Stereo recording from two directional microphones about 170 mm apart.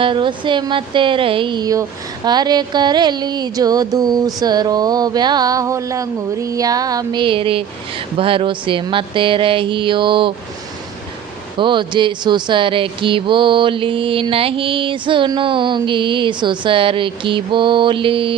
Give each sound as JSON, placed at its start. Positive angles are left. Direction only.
{"t": 0.0, "sound": "speech", "side_deg": -30}
{"t": 11.5, "sound": "speech", "side_deg": -30}